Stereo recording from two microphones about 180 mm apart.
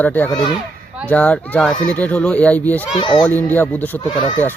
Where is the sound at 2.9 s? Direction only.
25° left (ahead or behind).